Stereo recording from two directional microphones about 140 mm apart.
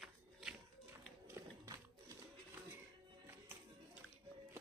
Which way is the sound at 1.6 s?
25° right (ahead or behind).